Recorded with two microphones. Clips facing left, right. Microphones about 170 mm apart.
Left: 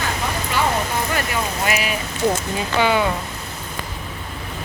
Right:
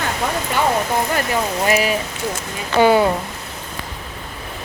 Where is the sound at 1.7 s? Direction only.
35° right (ahead or behind).